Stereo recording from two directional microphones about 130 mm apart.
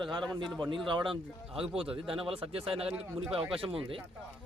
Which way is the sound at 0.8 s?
40° right (ahead or behind).